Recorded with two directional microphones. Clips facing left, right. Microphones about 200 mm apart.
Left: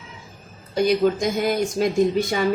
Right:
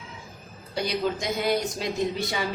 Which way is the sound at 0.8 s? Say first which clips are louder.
Left 8 dB; 50° left (ahead or behind).